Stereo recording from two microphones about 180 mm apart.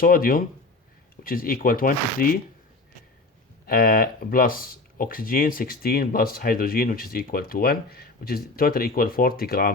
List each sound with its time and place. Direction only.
0.0 s speech: 50° left (ahead or behind)
3.7 s speech: 55° left (ahead or behind)